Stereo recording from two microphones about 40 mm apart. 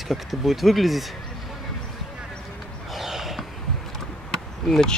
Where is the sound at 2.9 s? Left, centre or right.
Centre.